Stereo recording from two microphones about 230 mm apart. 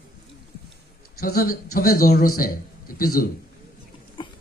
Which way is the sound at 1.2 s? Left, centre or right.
Left.